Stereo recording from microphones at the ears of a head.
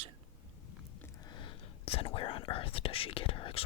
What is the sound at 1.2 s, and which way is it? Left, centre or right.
Whispering, left.